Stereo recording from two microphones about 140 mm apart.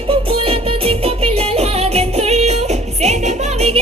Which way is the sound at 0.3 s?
40° right (ahead or behind).